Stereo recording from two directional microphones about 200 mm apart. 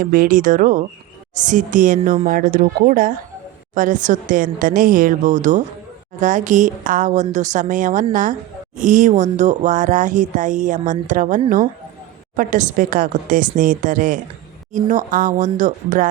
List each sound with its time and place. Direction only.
0.0 s a woman's voice: 45° right (ahead or behind)